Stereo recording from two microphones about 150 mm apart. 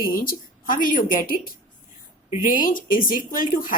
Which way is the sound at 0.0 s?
75° left (ahead or behind).